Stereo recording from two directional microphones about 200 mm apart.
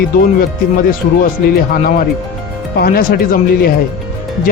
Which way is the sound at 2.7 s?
50° left (ahead or behind).